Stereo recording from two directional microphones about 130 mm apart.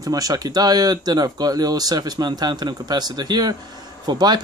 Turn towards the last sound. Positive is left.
turn(degrees=-35)  # may be behind; listen again after turning